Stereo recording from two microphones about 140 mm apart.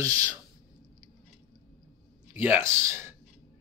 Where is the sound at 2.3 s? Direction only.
15° right (ahead or behind).